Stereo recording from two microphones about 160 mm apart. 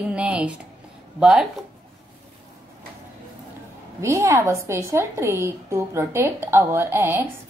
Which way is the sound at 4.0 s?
15° right (ahead or behind).